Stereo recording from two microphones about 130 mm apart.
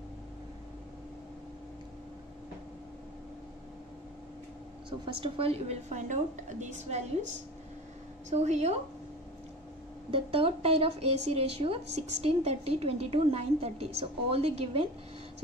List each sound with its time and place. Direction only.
4.8 s a woman's voice: 40° right (ahead or behind); by 7.1 s 65° right (ahead or behind)
8.3 s a woman's voice: 65° right (ahead or behind)
10.1 s a woman's voice: 45° right (ahead or behind)